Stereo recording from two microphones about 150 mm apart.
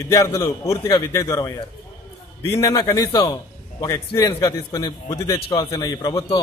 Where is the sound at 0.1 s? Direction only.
20° left (ahead or behind).